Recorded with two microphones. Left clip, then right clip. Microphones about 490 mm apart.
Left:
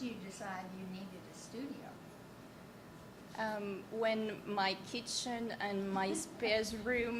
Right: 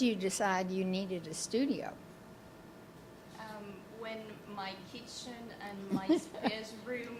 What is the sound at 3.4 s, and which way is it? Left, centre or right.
A woman's voice, left.